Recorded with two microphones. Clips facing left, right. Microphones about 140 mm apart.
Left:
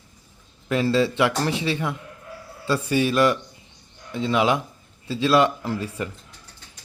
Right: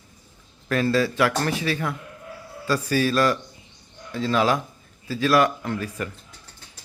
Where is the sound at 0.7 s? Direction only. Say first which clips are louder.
Left 1 dB; 20° left (ahead or behind).